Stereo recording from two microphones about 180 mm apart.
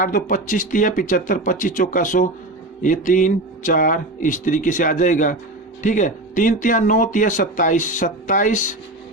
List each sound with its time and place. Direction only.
0.0 s speech: 50° left (ahead or behind)